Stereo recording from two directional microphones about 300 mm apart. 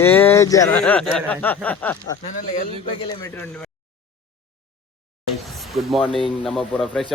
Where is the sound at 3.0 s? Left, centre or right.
Centre.